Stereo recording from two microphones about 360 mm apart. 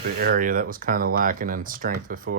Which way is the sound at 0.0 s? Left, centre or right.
Right.